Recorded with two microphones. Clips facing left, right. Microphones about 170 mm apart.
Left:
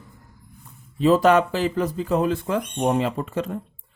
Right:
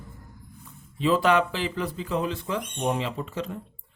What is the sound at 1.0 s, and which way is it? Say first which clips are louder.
Speech: left 5 dB; 45° left (ahead or behind).